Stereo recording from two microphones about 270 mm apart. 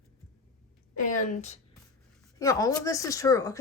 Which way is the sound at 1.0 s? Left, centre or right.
Left.